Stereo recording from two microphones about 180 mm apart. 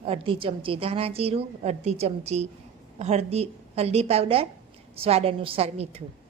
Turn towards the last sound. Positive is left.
turn(degrees=-35)  # may be behind; listen again after turning